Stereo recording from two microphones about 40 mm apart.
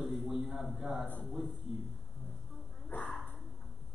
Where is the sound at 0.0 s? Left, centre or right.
Centre.